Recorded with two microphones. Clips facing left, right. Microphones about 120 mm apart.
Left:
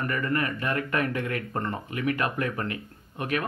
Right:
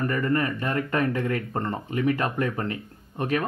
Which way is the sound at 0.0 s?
30° right (ahead or behind).